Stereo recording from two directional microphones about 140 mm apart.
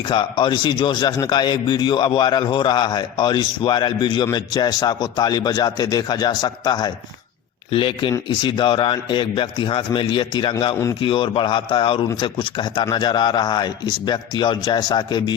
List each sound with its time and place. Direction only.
0.0 s a man's voice: 35° left (ahead or behind)
7.7 s a man's voice: 40° left (ahead or behind)